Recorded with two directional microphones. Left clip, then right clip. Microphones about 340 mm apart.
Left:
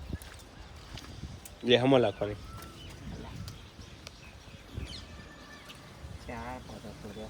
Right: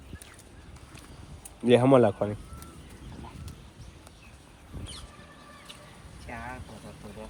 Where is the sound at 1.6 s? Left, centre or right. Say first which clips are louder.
Right 4 dB; centre.